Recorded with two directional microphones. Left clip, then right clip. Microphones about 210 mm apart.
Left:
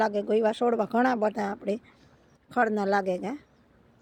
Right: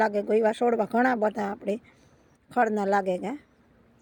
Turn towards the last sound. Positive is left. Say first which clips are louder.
# right 1 dB
turn(degrees=-5)  # may be behind; listen again after turning